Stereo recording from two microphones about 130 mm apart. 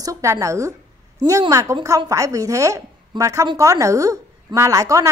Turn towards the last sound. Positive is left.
turn(degrees=-25)  # may be behind; listen again after turning